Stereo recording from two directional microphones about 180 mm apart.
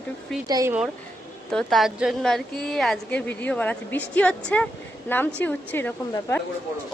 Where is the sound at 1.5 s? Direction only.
Centre (ahead or behind).